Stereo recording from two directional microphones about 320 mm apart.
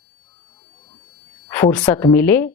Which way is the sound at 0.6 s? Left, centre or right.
Centre.